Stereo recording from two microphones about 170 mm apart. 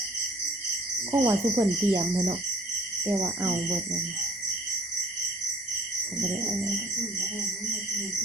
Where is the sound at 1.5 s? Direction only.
15° right (ahead or behind).